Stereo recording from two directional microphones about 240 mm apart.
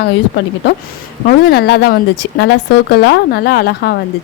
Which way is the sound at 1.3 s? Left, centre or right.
Left.